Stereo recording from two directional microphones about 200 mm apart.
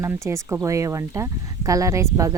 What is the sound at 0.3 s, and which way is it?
Speech, 15° right (ahead or behind).